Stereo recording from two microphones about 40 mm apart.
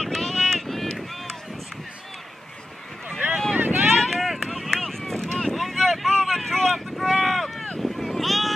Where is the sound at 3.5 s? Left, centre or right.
Right.